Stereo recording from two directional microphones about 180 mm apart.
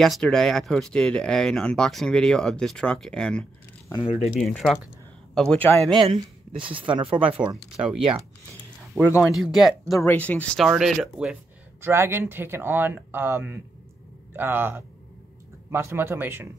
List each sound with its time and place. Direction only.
0.0 s speech: 5° left (ahead or behind)
3.9 s speech: 30° left (ahead or behind)
4.4 s a man's voice: 5° left (ahead or behind)
5.9 s speech: 25° right (ahead or behind)
7.8 s speech: 5° right (ahead or behind)
9.3 s speech: centre (ahead or behind)
9.9 s speech: 10° left (ahead or behind)
11.8 s speech: 15° right (ahead or behind)